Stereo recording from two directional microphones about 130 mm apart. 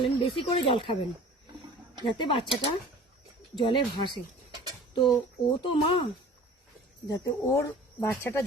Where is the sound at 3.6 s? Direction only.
35° left (ahead or behind).